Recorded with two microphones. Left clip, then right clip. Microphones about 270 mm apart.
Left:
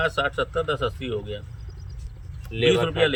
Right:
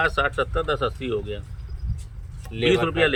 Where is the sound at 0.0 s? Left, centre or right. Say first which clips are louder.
Right 2 dB; centre.